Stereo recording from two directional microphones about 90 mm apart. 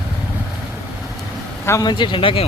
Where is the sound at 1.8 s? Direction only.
60° left (ahead or behind); by 2.4 s 75° left (ahead or behind).